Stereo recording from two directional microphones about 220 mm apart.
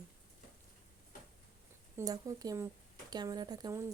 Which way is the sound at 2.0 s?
15° right (ahead or behind).